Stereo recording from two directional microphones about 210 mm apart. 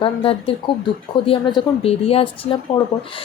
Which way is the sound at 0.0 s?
25° left (ahead or behind).